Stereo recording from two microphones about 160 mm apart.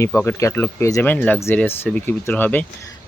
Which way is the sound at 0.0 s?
15° left (ahead or behind).